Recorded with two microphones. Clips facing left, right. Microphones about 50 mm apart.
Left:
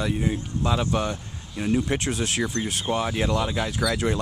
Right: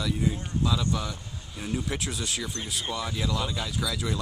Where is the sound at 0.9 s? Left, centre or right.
Left.